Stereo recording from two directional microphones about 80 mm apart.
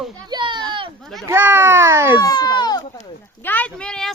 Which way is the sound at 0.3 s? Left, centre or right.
Right.